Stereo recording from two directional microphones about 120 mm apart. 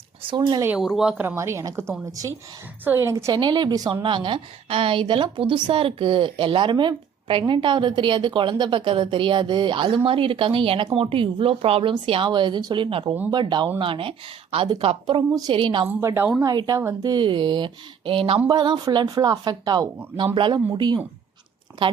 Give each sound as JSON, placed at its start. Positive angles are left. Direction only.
{"t": 0.2, "sound": "a woman's voice", "side_deg": -40}
{"t": 0.8, "sound": "speech", "side_deg": -5}
{"t": 1.1, "sound": "a woman's voice", "side_deg": -15}
{"t": 2.8, "sound": "a woman's voice", "side_deg": -20}
{"t": 3.3, "sound": "a woman's voice", "side_deg": -40}
{"t": 15.9, "sound": "a woman's voice", "side_deg": -20}
{"t": 16.4, "sound": "a woman's voice", "side_deg": -35}
{"t": 18.4, "sound": "a woman's voice", "side_deg": -35}
{"t": 20.1, "sound": "a woman's voice", "side_deg": -45}